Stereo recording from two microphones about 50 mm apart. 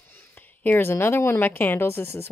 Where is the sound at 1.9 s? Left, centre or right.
Left.